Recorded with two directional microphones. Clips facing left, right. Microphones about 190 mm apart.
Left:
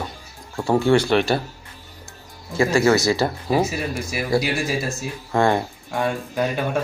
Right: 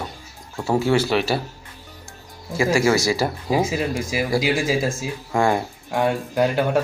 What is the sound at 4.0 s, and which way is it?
Speech, 90° right.